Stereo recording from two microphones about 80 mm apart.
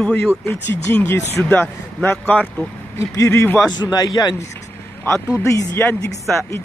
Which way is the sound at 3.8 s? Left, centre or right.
Left.